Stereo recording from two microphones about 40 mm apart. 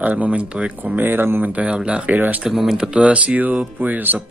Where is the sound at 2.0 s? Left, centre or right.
Right.